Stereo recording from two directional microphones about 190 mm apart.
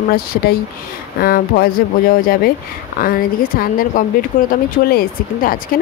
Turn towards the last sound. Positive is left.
turn(degrees=45)  # may be behind; listen again after turning